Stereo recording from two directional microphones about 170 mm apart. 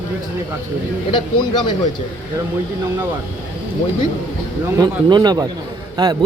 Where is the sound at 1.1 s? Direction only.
30° left (ahead or behind).